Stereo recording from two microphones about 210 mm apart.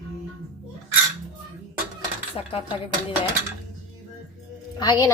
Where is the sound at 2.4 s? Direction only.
25° left (ahead or behind).